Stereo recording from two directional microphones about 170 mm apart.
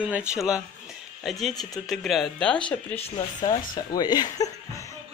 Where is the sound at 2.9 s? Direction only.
25° left (ahead or behind).